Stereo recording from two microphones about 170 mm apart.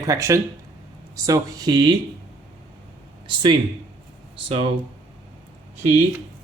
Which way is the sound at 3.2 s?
25° right (ahead or behind).